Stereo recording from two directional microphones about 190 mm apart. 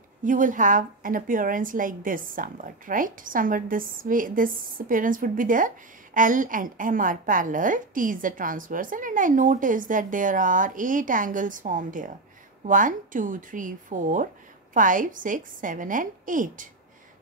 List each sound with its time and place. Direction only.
0.2 s a woman's voice: 45° right (ahead or behind)